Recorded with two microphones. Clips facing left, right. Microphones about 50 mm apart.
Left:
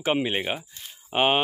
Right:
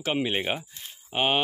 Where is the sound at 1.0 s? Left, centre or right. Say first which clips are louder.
Left 3 dB; centre.